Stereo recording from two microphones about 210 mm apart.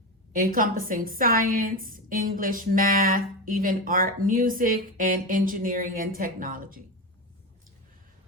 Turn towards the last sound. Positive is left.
turn(degrees=-40)  # may be behind; listen again after turning